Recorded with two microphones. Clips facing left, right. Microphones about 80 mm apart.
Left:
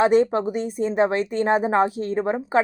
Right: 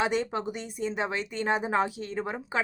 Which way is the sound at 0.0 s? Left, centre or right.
Left.